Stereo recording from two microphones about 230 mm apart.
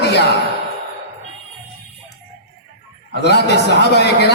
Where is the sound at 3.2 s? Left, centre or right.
Left.